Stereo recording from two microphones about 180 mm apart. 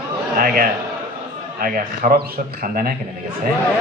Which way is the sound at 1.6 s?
50° right (ahead or behind).